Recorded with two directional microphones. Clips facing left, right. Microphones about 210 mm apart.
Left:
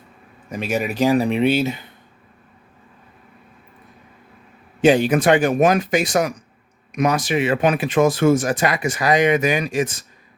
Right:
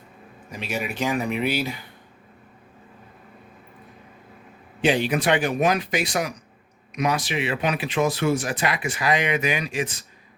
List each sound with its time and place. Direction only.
0.6 s speech: 40° left (ahead or behind); by 1.9 s 25° left (ahead or behind)
4.8 s speech: 45° left (ahead or behind)